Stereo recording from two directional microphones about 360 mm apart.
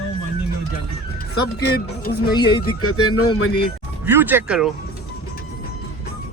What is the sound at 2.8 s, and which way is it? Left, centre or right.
Speech, left.